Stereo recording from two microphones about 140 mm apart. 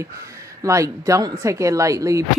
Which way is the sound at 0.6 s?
25° right (ahead or behind).